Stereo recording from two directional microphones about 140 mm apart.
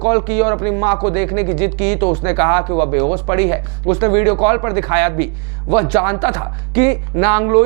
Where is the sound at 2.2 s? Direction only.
20° right (ahead or behind).